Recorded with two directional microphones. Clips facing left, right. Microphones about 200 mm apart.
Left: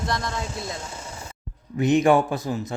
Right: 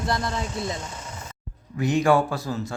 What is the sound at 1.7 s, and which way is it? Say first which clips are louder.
Speech: left 2 dB; 20° left (ahead or behind).